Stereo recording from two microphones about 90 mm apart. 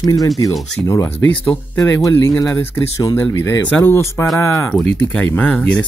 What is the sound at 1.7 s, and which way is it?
Speech, 40° left (ahead or behind).